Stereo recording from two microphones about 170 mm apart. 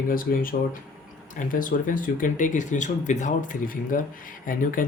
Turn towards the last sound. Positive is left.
turn(degrees=55)  # may be behind; listen again after turning